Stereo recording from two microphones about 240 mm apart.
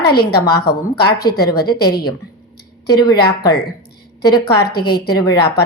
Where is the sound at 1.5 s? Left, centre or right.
Centre.